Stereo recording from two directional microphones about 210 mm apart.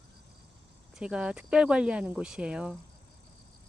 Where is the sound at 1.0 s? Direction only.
5° right (ahead or behind).